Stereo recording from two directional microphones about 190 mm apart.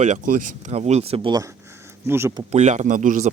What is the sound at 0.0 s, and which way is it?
Speech, 40° right (ahead or behind).